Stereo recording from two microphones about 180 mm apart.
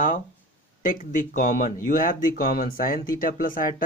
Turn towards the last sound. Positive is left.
turn(degrees=50)  # may be behind; listen again after turning